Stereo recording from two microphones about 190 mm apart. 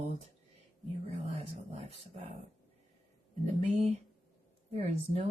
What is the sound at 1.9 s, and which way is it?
Speech, 35° right (ahead or behind).